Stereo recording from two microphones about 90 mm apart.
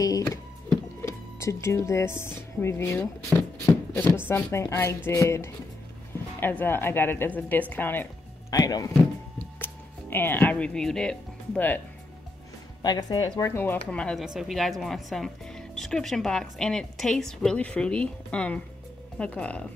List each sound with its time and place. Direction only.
0.0 s music: 40° left (ahead or behind)
1.0 s speech: 30° left (ahead or behind)
3.6 s a sound: 20° left (ahead or behind)
4.1 s a woman's voice: 25° left (ahead or behind)
6.4 s a woman's voice: 25° left (ahead or behind)
8.5 s speech: 45° left (ahead or behind)
9.6 s speech: 25° left (ahead or behind); by 11.6 s 5° left (ahead or behind)
12.8 s speech: 50° left (ahead or behind)
13.5 s a woman's voice: 25° left (ahead or behind)
13.8 s speech: 10° left (ahead or behind)
14.1 s speech: centre (ahead or behind); by 19.6 s 15° left (ahead or behind)